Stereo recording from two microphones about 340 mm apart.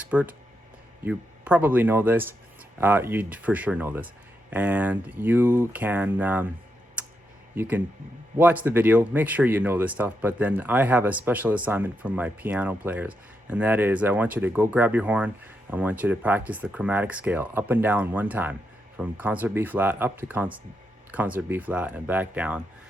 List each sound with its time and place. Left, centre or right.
0.0 s speech: centre
7.0 s a sound: centre
7.5 s a man's voice: centre